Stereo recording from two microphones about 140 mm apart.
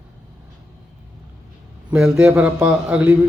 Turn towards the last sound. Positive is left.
turn(degrees=-10)  # may be behind; listen again after turning